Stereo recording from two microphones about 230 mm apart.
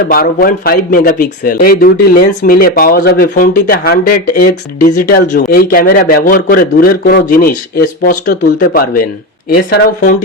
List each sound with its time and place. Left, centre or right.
0.1 s speech: left